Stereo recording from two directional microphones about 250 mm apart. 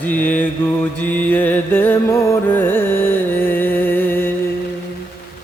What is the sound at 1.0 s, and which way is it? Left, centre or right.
Music, centre.